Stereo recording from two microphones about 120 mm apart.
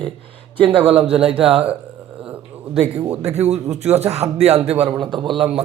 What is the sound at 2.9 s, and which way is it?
Speech, 55° right (ahead or behind).